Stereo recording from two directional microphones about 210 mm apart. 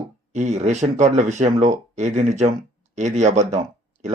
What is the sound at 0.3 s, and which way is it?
Speech, 35° right (ahead or behind).